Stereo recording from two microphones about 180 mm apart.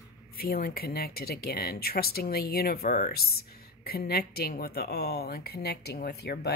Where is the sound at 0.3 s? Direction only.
55° left (ahead or behind).